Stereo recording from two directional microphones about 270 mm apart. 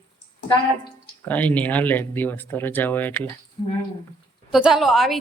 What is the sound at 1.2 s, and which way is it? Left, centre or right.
Speech, centre.